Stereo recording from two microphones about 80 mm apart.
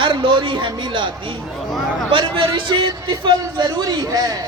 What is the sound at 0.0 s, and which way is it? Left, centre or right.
A man's voice, right.